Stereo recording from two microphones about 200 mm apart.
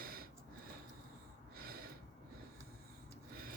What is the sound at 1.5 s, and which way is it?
Gasp, 50° right (ahead or behind).